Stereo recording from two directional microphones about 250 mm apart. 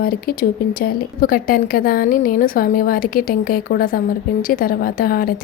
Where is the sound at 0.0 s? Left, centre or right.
Left.